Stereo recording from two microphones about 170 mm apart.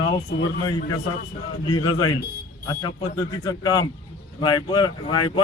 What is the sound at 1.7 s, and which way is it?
Speech, 25° left (ahead or behind).